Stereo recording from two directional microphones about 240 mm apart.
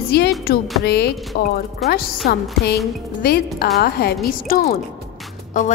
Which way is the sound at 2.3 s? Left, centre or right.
Left.